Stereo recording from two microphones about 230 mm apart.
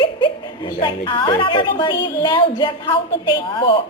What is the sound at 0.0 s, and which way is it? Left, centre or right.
A woman's voice, left.